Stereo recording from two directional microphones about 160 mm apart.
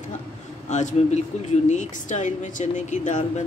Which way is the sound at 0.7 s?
50° left (ahead or behind).